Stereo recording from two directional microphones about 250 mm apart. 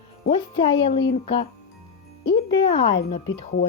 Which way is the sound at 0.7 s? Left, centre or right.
Left.